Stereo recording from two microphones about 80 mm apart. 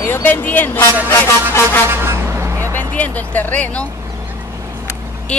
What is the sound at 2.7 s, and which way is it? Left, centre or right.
Speech, centre.